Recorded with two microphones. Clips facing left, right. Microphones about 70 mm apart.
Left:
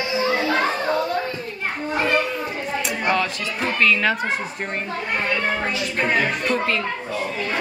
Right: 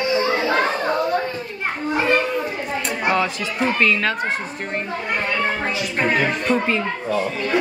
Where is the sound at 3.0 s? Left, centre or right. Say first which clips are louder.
Right 2 dB; centre.